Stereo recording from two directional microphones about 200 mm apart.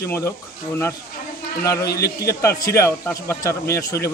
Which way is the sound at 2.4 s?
15° left (ahead or behind).